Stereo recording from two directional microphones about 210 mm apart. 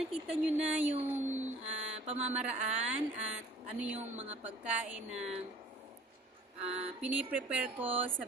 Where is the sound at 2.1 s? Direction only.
30° right (ahead or behind).